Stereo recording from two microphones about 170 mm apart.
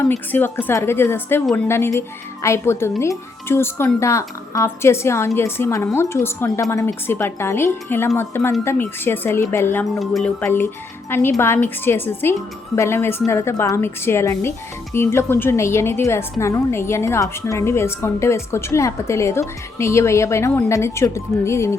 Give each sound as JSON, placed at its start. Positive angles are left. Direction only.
{"t": 0.3, "sound": "a woman's voice", "side_deg": 10}
{"t": 10.0, "sound": "speech", "side_deg": 0}
{"t": 10.4, "sound": "a woman's voice", "side_deg": 15}